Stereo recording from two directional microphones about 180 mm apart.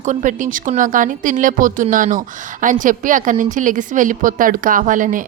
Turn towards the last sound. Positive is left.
turn(degrees=-45)  # may be behind; listen again after turning